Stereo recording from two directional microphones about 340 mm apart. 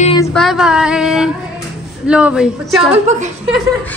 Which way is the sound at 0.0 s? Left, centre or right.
Centre.